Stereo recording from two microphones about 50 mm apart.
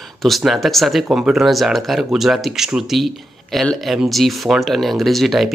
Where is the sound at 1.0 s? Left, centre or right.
Centre.